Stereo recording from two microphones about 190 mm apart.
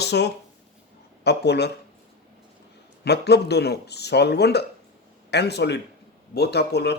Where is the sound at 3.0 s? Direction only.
60° left (ahead or behind).